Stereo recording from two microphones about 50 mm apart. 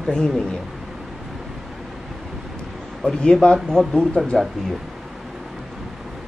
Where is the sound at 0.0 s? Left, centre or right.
Centre.